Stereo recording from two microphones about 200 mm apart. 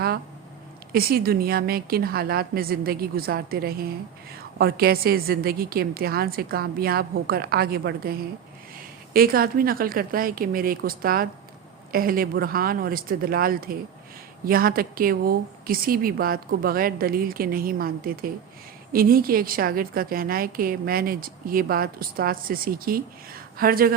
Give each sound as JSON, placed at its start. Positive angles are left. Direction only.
{"t": 0.9, "sound": "a woman's voice", "side_deg": -50}
{"t": 9.1, "sound": "a woman's voice", "side_deg": -45}